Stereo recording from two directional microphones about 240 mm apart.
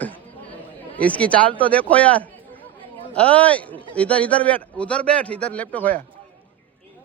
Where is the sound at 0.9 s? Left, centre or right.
Centre.